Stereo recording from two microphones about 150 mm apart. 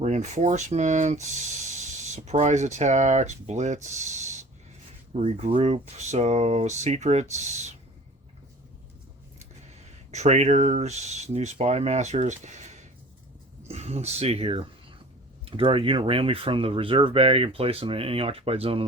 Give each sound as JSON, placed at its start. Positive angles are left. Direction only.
{"t": 0.0, "sound": "speech", "side_deg": -50}
{"t": 3.8, "sound": "a sound", "side_deg": -50}
{"t": 5.1, "sound": "speech", "side_deg": -45}
{"t": 10.1, "sound": "speech", "side_deg": -50}